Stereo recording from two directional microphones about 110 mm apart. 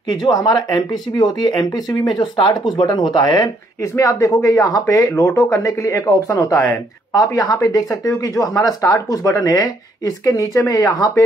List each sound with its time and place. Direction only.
0.1 s speech: 40° left (ahead or behind)
3.9 s speech: 30° left (ahead or behind)